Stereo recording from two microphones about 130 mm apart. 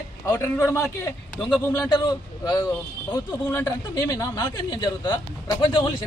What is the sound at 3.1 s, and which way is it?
Speech, 20° left (ahead or behind).